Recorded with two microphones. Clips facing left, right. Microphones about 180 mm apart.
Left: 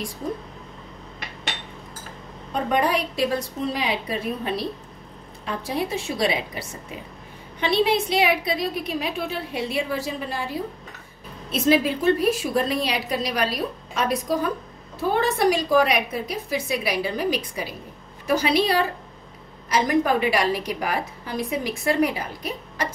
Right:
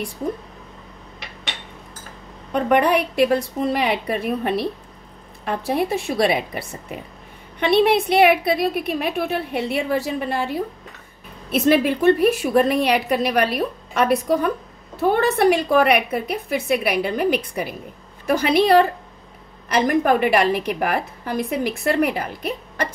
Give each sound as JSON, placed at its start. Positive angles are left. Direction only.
{"t": 2.5, "sound": "a woman's voice", "side_deg": -65}